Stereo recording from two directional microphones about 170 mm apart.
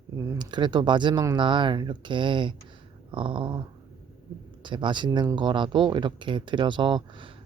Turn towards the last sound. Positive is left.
turn(degrees=-30)  # may be behind; listen again after turning